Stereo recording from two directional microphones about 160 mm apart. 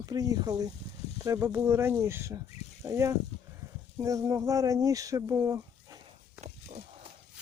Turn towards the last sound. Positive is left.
turn(degrees=-45)  # may be behind; listen again after turning